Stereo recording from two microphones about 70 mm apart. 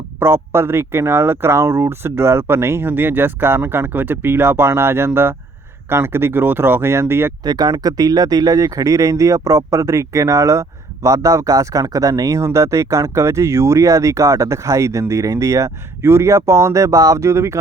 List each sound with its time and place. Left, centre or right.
0.2 s speech: right
7.4 s speech: right
12.5 s speech: right